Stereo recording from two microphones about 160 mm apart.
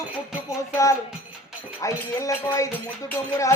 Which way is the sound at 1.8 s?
20° left (ahead or behind).